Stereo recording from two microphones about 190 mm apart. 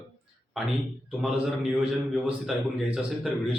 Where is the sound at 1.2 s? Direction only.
5° right (ahead or behind).